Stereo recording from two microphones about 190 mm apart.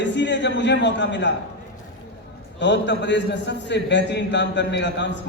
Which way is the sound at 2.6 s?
70° left (ahead or behind).